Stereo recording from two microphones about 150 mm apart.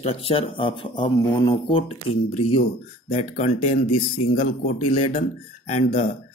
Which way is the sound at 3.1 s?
50° left (ahead or behind).